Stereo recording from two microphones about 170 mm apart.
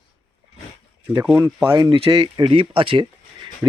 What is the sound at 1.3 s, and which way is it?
Speech, 15° right (ahead or behind).